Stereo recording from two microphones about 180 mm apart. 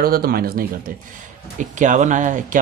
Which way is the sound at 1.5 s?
45° right (ahead or behind).